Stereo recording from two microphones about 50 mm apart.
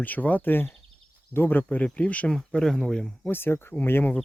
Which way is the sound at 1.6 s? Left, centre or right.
Left.